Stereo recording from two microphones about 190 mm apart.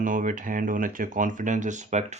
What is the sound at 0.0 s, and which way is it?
Speech, 45° right (ahead or behind).